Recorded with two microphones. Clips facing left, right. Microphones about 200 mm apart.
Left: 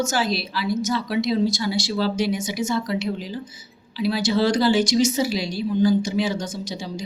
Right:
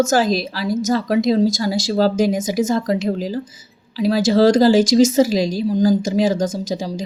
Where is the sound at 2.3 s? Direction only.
90° right.